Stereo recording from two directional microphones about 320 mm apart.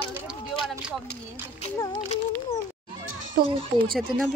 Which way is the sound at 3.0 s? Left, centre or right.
Right.